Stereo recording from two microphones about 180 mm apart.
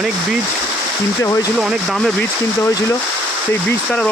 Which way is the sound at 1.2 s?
20° left (ahead or behind).